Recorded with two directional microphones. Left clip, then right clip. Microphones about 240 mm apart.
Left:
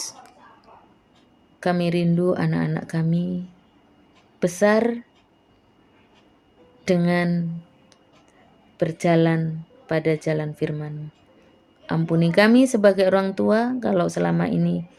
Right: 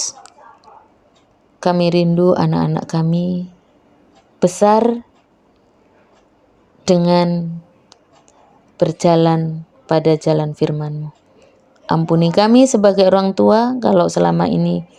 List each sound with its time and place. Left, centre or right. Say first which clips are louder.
0.0 s whispering: right 10 dB; centre
1.5 s speech: right 8 dB; right
6.8 s speech: right 8 dB; right
8.8 s speech: right 7 dB; right